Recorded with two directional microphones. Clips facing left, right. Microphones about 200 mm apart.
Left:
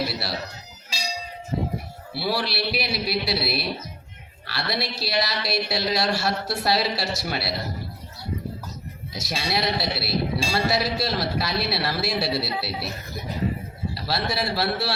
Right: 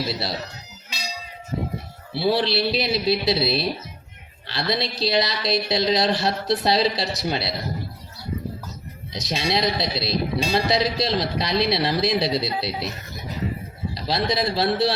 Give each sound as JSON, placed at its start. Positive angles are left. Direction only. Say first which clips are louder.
{"t": 0.1, "sound": "a man's voice", "louder": "right 3 dB", "side_deg": -20}
{"t": 2.1, "sound": "a man's voice", "louder": "right 6 dB", "side_deg": -20}
{"t": 9.1, "sound": "a man's voice", "louder": "right 3 dB", "side_deg": -20}
{"t": 13.9, "sound": "a man's voice", "louder": "right 4 dB", "side_deg": -20}